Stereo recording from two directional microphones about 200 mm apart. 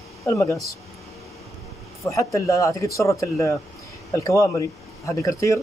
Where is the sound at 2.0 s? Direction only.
15° left (ahead or behind).